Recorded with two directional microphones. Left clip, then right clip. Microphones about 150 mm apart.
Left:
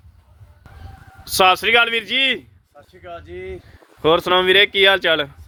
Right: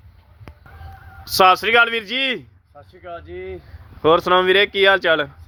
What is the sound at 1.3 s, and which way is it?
Speech, 20° left (ahead or behind).